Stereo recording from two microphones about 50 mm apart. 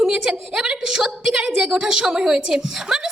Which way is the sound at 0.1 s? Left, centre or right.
Centre.